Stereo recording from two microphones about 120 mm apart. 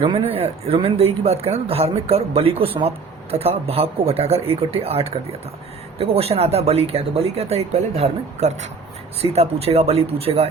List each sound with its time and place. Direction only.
0.0 s speech: 50° right (ahead or behind); by 8.7 s 70° right (ahead or behind)
9.2 s speech: 55° right (ahead or behind)